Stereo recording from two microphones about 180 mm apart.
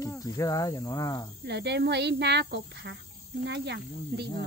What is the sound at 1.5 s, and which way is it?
Speech, 70° right (ahead or behind).